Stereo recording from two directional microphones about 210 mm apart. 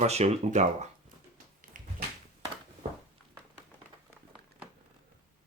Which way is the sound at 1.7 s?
40° right (ahead or behind).